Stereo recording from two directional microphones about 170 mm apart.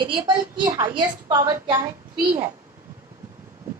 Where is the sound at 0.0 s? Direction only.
25° right (ahead or behind).